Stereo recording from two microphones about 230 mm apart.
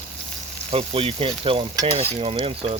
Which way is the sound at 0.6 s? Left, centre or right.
Right.